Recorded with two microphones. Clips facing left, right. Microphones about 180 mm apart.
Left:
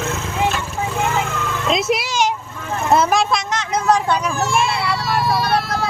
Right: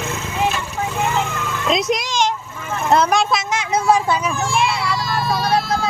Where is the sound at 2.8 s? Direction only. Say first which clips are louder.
Even; centre (ahead or behind).